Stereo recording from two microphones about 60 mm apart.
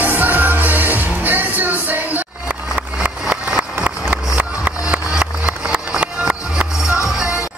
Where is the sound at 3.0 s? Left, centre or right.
Centre.